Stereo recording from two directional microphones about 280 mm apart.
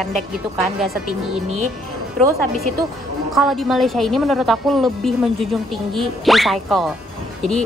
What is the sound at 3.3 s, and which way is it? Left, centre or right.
A woman's voice, centre.